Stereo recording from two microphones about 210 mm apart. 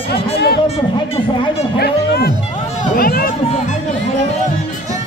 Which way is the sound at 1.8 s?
50° left (ahead or behind).